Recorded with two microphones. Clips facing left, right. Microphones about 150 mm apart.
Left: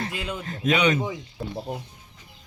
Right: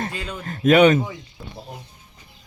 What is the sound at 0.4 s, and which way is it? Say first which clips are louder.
Speech: right 9 dB; 50° right (ahead or behind).